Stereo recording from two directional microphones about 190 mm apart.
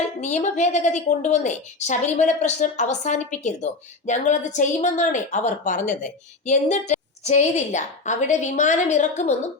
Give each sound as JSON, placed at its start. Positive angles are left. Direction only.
{"t": 0.2, "sound": "a woman's voice", "side_deg": 40}